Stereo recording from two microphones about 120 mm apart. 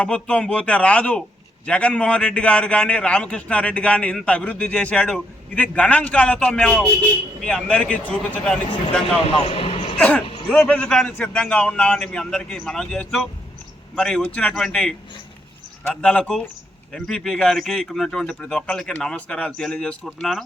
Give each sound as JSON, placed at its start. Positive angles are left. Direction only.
{"t": 0.0, "sound": "a man's voice", "side_deg": 10}
{"t": 9.2, "sound": "speech", "side_deg": 50}
{"t": 10.0, "sound": "a man's voice", "side_deg": 10}
{"t": 16.0, "sound": "a man's voice", "side_deg": 10}